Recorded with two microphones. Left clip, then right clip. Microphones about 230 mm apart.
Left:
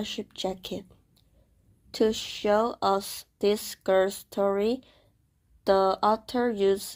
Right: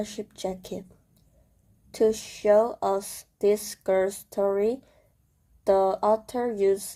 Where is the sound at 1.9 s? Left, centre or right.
Left.